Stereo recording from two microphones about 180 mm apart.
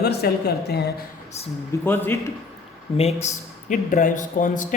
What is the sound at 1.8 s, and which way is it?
Speech, 10° left (ahead or behind).